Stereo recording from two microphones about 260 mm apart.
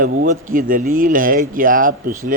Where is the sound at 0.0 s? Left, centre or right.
Right.